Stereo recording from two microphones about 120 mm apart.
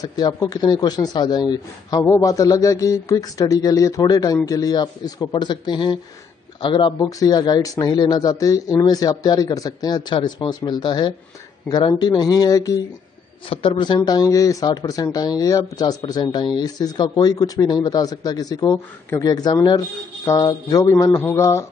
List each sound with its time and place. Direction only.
0.0 s speech: 35° left (ahead or behind)
7.1 s speech: 30° left (ahead or behind)
13.5 s speech: 45° left (ahead or behind); by 21.6 s 25° left (ahead or behind)